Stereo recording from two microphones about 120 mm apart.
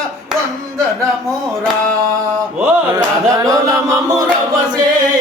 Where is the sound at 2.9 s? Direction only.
25° right (ahead or behind).